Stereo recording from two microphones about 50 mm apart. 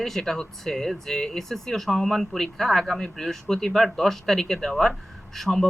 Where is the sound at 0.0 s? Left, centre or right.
Centre.